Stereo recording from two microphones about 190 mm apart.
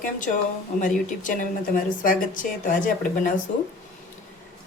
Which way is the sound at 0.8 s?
45° left (ahead or behind).